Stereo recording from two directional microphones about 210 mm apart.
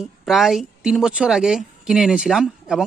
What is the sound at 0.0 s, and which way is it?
A woman's voice, centre (ahead or behind).